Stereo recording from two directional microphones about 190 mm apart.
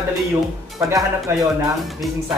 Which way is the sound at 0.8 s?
15° right (ahead or behind).